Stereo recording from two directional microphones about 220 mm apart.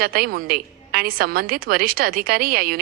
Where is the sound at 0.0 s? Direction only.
40° right (ahead or behind).